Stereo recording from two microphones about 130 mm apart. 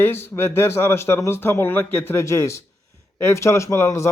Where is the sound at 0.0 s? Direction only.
20° left (ahead or behind).